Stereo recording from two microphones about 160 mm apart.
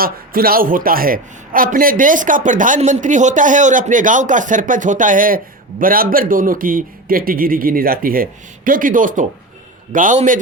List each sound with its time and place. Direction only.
0.0 s a man's voice: 65° right (ahead or behind)